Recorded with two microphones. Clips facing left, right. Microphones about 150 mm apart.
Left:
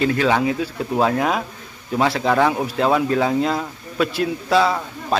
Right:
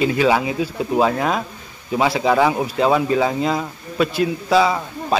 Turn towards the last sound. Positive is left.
turn(degrees=0)  # may be behind; listen again after turning